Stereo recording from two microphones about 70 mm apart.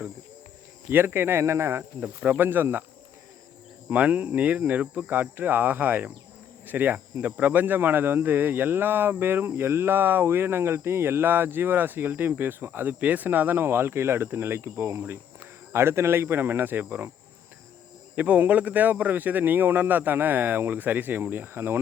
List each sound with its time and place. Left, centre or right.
0.9 s speech: right
2.0 s speech: right
3.8 s speech: right
18.2 s speech: right